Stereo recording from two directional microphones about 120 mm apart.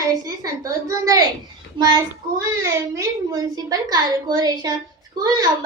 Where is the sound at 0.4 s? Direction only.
30° right (ahead or behind).